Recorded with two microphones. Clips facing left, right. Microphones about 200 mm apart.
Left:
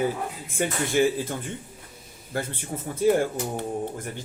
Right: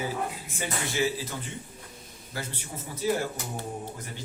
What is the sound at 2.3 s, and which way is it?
Speech, 50° left (ahead or behind).